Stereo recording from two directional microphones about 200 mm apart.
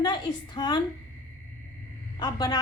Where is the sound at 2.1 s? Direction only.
20° left (ahead or behind).